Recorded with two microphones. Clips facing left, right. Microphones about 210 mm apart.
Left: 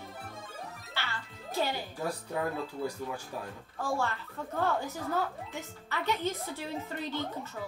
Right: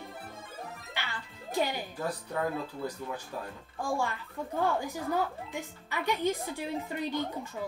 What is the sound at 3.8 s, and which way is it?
A woman's voice, 15° right (ahead or behind).